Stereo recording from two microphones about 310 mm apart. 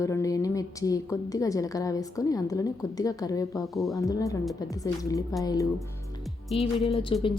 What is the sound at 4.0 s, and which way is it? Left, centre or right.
A woman's voice, centre.